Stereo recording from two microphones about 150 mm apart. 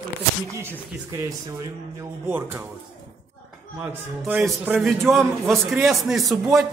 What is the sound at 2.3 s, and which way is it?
Speech, 15° right (ahead or behind).